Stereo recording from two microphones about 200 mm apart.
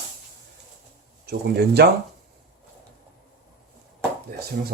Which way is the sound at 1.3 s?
55° right (ahead or behind).